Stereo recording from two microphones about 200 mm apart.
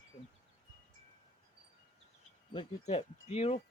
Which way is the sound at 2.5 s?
25° left (ahead or behind).